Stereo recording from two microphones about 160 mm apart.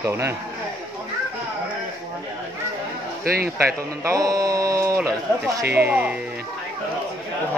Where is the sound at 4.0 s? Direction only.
20° right (ahead or behind).